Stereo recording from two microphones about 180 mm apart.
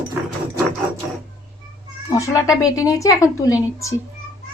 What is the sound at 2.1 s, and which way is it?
A woman's voice, 15° left (ahead or behind).